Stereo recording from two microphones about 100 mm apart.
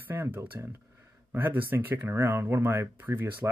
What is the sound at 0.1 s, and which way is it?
Speech, 20° right (ahead or behind).